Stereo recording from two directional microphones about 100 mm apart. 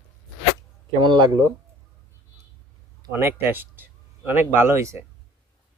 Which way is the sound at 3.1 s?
20° right (ahead or behind).